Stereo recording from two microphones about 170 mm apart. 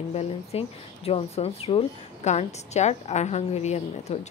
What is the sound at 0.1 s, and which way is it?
Speech, 35° left (ahead or behind).